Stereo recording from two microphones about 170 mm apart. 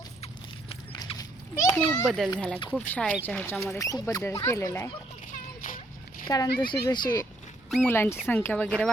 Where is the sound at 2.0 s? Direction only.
Centre (ahead or behind); by 4.9 s 15° left (ahead or behind).